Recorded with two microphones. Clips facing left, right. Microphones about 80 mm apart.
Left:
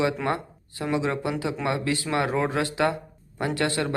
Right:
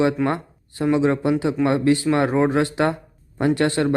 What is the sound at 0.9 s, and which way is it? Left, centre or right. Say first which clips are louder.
Speech: right 7 dB; right.